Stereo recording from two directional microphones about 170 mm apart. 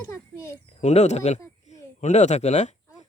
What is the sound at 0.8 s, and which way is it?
Speech, 40° left (ahead or behind).